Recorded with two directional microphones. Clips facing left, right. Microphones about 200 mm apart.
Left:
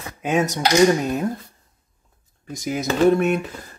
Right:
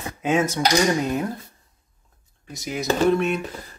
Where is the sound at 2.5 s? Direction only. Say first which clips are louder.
Left 4 dB; 50° left (ahead or behind).